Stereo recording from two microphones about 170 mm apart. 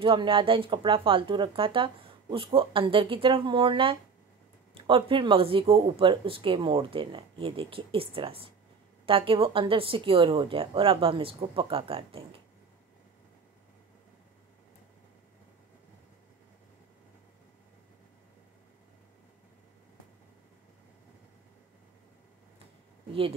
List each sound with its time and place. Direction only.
0.0 s speech: 30° right (ahead or behind)